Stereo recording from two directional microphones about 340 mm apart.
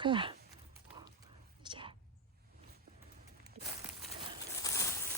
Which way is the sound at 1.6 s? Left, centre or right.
Centre.